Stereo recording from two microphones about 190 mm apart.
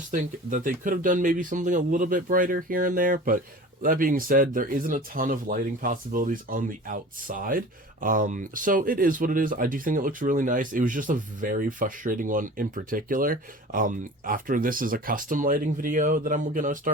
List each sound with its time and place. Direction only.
0.1 s speech: 45° right (ahead or behind)